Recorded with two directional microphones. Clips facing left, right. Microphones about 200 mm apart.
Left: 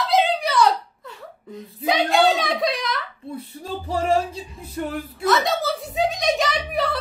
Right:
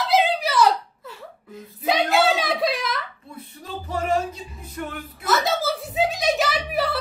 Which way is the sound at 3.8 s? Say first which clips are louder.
Left 2 dB; 30° left (ahead or behind).